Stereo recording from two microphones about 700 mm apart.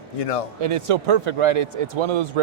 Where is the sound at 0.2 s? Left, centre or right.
Left.